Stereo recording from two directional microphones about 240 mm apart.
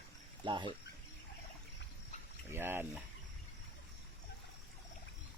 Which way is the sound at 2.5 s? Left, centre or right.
Centre.